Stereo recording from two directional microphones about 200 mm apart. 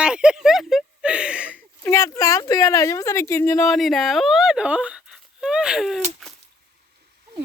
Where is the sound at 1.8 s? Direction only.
15° left (ahead or behind).